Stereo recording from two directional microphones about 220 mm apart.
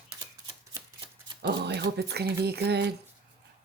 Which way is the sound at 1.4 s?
50° right (ahead or behind).